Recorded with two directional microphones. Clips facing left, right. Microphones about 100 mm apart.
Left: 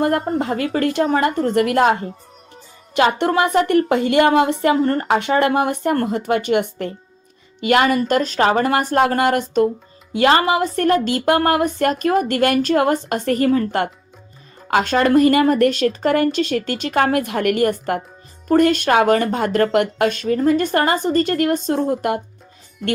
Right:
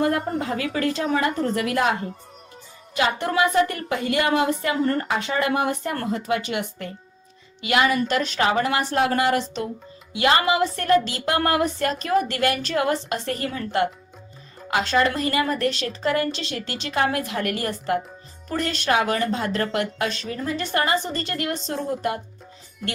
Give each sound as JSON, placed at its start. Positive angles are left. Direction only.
{"t": 0.0, "sound": "speech", "side_deg": 60}
{"t": 3.2, "sound": "speech", "side_deg": 65}
{"t": 4.8, "sound": "speech", "side_deg": 40}
{"t": 5.0, "sound": "speech", "side_deg": 55}
{"t": 7.6, "sound": "speech", "side_deg": 45}
{"t": 10.1, "sound": "speech", "side_deg": 40}